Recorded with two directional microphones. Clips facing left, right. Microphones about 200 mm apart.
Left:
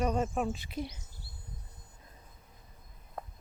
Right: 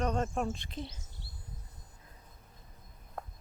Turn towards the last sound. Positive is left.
turn(degrees=0)  # may be behind; listen again after turning